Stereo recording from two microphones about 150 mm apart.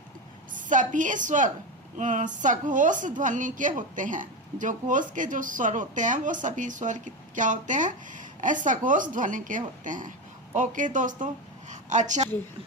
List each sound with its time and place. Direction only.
0.5 s a woman's voice: 60° right (ahead or behind)